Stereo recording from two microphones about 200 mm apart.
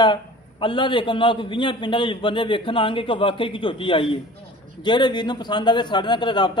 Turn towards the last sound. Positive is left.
turn(degrees=20)  # may be behind; listen again after turning